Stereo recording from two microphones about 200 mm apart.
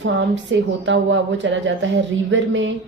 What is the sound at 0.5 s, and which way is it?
Speech, 70° right (ahead or behind).